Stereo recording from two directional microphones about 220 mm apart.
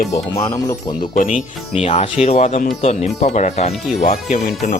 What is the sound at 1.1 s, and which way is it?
Speech, 40° left (ahead or behind).